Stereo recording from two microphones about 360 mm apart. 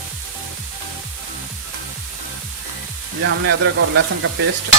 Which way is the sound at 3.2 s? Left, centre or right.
Right.